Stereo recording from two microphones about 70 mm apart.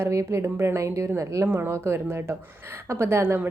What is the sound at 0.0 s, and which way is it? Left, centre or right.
A woman's voice, right.